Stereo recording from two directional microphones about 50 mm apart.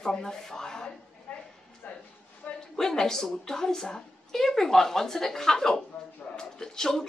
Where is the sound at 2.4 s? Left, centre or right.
Left.